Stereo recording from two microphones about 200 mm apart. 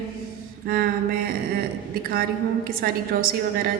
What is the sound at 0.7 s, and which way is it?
Speech, 45° right (ahead or behind).